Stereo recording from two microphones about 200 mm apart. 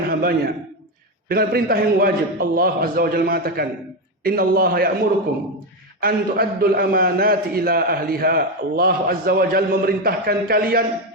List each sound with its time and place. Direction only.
0.1 s a sound: 50° right (ahead or behind)
1.3 s a man's voice: 50° right (ahead or behind)
6.0 s a man's voice: 45° right (ahead or behind)